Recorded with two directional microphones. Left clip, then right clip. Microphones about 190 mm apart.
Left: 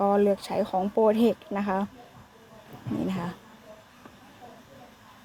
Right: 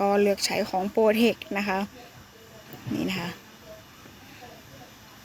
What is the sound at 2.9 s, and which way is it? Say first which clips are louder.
Speech: right 2 dB; centre (ahead or behind).